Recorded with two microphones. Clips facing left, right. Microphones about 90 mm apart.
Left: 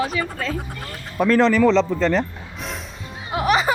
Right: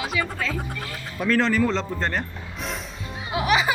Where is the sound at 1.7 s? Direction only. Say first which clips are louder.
Left 8 dB; 90° left.